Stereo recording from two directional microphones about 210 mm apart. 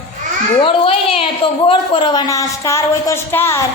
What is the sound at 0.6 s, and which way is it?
A man's voice, 25° left (ahead or behind).